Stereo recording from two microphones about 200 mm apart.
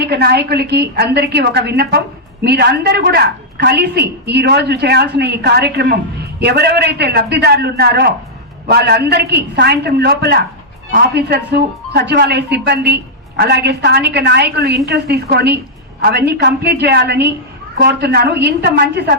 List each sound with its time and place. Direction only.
0.0 s a man's voice: 55° right (ahead or behind)